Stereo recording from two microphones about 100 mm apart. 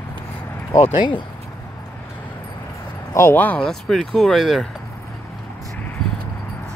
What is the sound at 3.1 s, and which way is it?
Speech, 25° left (ahead or behind).